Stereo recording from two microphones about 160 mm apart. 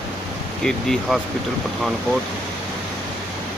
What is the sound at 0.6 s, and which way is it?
Speech, 5° left (ahead or behind).